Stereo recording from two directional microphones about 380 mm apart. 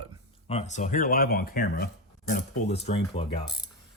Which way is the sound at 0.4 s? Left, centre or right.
Centre.